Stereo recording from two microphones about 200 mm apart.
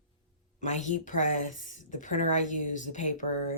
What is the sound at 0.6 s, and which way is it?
Speech, 35° left (ahead or behind).